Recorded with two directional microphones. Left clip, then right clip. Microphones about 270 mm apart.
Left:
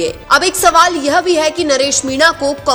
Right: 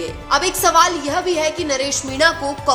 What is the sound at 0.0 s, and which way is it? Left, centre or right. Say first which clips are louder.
A woman's voice: left 6 dB; left.